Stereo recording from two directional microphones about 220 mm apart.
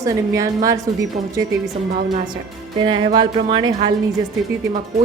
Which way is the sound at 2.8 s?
20° right (ahead or behind).